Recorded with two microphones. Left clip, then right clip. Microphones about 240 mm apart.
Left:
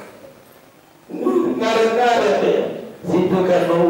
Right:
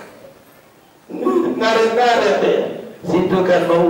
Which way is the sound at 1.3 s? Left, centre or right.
Left.